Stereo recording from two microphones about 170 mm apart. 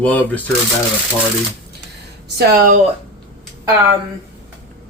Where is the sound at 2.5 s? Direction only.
60° right (ahead or behind).